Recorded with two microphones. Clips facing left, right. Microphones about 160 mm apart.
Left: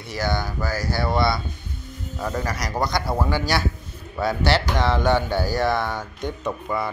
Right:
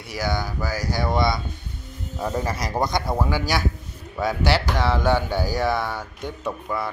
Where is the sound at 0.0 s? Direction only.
10° right (ahead or behind).